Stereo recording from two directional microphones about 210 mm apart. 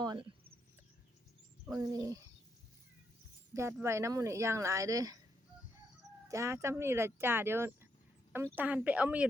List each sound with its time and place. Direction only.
0.0 s a sound: 20° right (ahead or behind)
1.8 s speech: 15° right (ahead or behind)
3.5 s speech: 15° right (ahead or behind)
6.2 s speech: 15° right (ahead or behind)